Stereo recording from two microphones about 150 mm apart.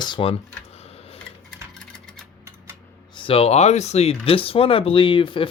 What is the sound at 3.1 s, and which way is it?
Speech, 35° left (ahead or behind).